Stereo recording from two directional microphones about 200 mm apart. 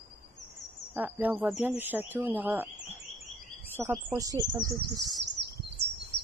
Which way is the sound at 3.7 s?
10° right (ahead or behind).